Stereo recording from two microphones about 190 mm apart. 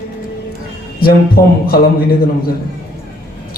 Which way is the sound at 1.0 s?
50° left (ahead or behind).